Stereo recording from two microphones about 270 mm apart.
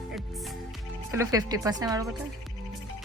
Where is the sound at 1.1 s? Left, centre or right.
Centre.